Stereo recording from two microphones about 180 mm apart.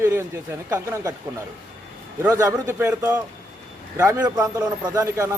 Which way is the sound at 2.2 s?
15° right (ahead or behind).